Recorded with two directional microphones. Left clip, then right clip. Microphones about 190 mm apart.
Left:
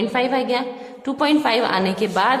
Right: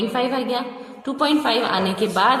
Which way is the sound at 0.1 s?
20° left (ahead or behind).